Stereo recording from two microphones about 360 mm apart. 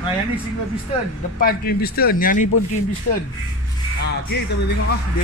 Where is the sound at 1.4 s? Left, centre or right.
Left.